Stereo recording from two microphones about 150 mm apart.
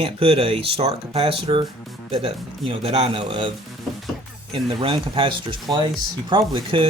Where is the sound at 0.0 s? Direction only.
40° right (ahead or behind).